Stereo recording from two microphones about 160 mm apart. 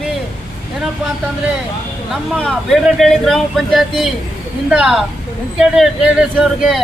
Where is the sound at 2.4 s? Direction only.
Centre (ahead or behind).